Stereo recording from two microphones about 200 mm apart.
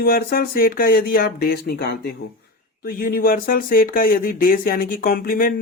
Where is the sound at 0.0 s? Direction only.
50° left (ahead or behind).